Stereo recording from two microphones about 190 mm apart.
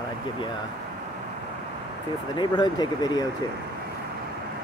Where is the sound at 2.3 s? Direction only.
25° left (ahead or behind).